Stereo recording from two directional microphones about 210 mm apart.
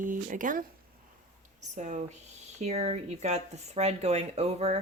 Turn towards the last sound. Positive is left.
turn(degrees=-30)  # may be behind; listen again after turning